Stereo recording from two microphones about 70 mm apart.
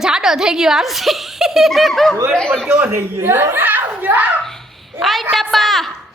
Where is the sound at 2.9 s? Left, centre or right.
Right.